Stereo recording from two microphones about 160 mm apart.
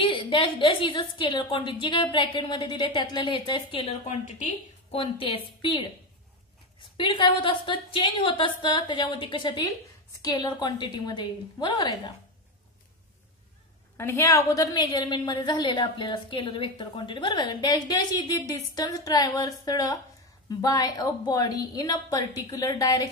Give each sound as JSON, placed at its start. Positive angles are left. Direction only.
{"t": 0.0, "sound": "a woman's voice", "side_deg": 35}
{"t": 4.9, "sound": "a woman's voice", "side_deg": 35}
{"t": 13.9, "sound": "a woman's voice", "side_deg": 15}